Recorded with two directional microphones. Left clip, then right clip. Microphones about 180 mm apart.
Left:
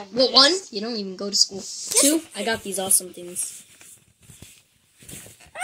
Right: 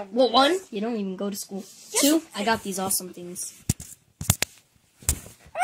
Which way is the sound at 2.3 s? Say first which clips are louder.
Right 1 dB; 50° right (ahead or behind).